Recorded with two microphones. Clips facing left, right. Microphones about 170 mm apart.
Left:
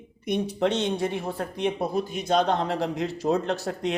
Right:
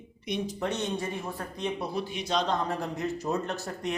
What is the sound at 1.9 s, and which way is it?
A man's voice, 45° left (ahead or behind).